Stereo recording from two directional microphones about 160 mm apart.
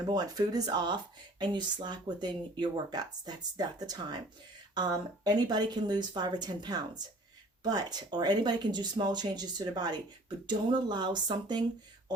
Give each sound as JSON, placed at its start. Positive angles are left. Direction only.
{"t": 0.0, "sound": "speech", "side_deg": -25}